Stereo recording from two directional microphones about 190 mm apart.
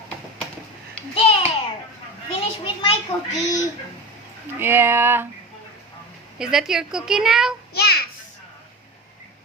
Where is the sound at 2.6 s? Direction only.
30° left (ahead or behind).